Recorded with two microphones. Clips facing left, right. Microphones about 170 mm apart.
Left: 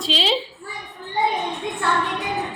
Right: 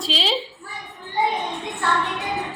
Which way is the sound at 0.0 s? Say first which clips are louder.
Left 2 dB; centre (ahead or behind).